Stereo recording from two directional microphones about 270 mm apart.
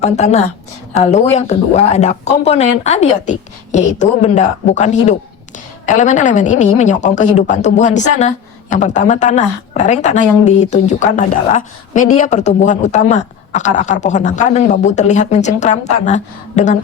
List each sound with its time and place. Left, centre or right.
0.0 s a woman's voice: left